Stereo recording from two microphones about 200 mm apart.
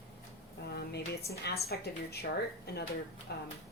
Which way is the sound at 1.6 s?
55° left (ahead or behind).